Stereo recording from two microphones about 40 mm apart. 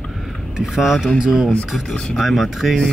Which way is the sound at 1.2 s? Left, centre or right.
Centre.